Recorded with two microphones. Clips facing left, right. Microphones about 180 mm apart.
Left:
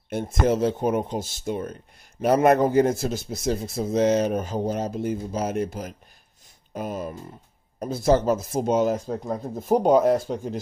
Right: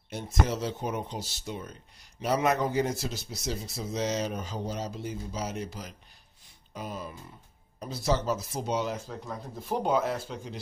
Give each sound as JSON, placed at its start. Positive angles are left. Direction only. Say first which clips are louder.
{"t": 0.1, "sound": "speech", "louder": "left 8 dB", "side_deg": 55}